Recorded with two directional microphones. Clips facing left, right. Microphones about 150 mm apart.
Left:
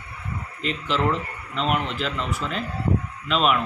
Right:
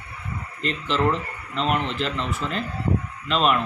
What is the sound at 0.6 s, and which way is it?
A man's voice, 5° left (ahead or behind).